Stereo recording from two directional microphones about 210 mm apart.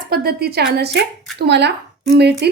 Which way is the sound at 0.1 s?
45° right (ahead or behind).